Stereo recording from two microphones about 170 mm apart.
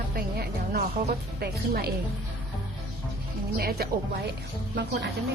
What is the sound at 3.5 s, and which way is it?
Speech, 65° right (ahead or behind).